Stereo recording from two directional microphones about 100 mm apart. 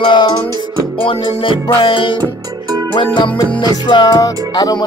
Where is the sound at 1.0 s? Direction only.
65° left (ahead or behind).